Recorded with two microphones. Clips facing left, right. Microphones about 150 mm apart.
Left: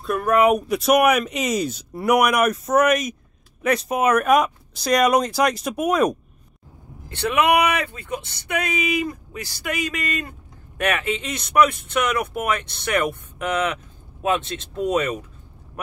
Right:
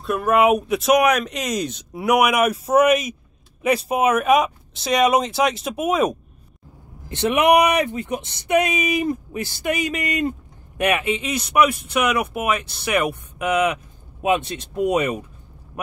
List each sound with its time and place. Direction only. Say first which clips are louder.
0.0 s speech: even; 5° right (ahead or behind)
7.1 s speech: right 3 dB; 20° right (ahead or behind)